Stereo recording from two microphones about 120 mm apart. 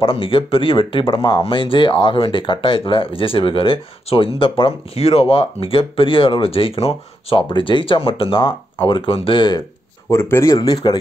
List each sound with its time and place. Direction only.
0.0 s speech: 50° left (ahead or behind)
10.0 s speech: 20° left (ahead or behind)
10.5 s speech: 35° left (ahead or behind)